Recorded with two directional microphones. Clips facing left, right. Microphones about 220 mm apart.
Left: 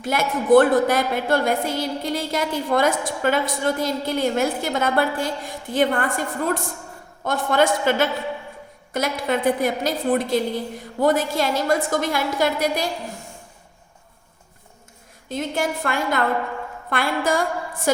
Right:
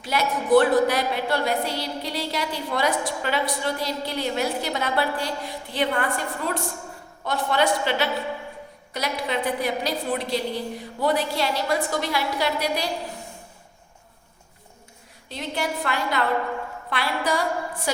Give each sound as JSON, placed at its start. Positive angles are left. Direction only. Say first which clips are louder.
{"t": 0.0, "sound": "a woman's voice", "louder": "left 2 dB", "side_deg": 50}
{"t": 15.3, "sound": "a woman's voice", "louder": "left 4 dB", "side_deg": 50}